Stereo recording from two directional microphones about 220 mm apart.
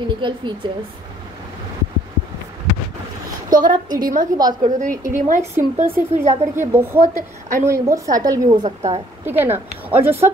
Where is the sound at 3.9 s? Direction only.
35° right (ahead or behind).